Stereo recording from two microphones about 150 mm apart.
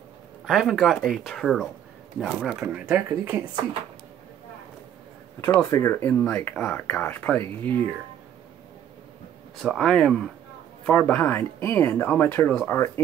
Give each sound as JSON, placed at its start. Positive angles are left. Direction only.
{"t": 0.5, "sound": "speech", "side_deg": 0}
{"t": 2.6, "sound": "speech", "side_deg": -15}
{"t": 5.6, "sound": "speech", "side_deg": 20}
{"t": 9.6, "sound": "speech", "side_deg": 0}